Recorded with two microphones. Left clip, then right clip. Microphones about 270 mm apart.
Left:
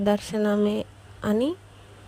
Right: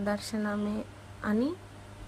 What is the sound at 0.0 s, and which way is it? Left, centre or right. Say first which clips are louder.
Speech: left 9 dB; left.